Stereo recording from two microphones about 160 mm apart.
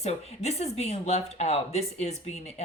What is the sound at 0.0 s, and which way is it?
Speech, 40° left (ahead or behind).